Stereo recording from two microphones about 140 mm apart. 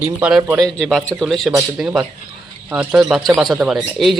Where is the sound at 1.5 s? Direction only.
10° right (ahead or behind).